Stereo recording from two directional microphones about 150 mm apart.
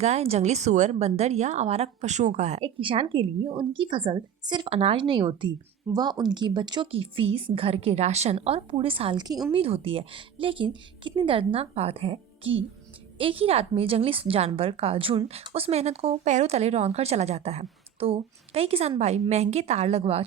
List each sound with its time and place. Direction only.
0.0 s a woman's voice: 45° right (ahead or behind)
2.8 s a woman's voice: 35° right (ahead or behind)
9.6 s a woman's voice: 40° right (ahead or behind)